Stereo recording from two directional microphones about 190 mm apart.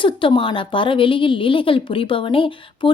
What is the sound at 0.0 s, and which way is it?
Speech, 25° left (ahead or behind).